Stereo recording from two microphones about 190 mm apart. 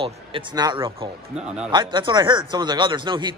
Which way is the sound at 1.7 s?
25° right (ahead or behind).